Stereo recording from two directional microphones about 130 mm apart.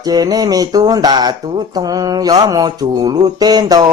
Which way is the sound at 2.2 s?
30° right (ahead or behind).